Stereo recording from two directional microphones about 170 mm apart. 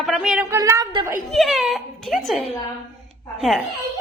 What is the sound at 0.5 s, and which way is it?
Speech, 20° right (ahead or behind).